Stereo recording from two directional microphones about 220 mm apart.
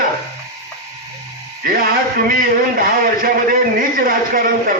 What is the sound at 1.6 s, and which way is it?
A man's voice, 40° right (ahead or behind).